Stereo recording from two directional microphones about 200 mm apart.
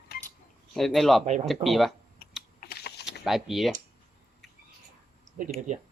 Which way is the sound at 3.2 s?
Centre (ahead or behind).